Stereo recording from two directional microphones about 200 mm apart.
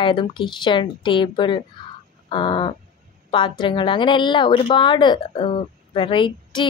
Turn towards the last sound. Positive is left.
turn(degrees=25)  # may be behind; listen again after turning